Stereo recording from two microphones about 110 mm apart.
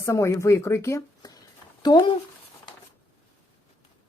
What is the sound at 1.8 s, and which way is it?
Speech, 40° left (ahead or behind).